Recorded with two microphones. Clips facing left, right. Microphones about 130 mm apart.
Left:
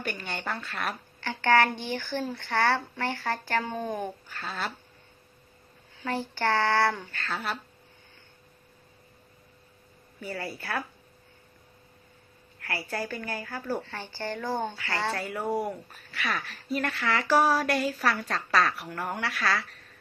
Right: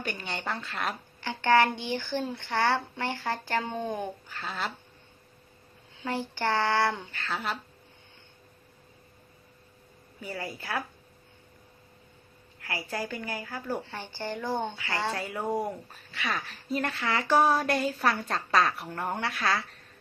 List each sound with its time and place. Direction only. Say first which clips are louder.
0.0 s a woman's voice: even; 20° right (ahead or behind)
6.0 s speech: left 1 dB; 15° right (ahead or behind)
10.3 s speech: left 1 dB; 15° right (ahead or behind)
12.5 s a woman's voice: left 1 dB; 15° right (ahead or behind)